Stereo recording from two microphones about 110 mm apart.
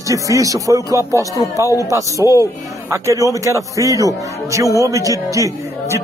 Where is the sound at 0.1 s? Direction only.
30° right (ahead or behind).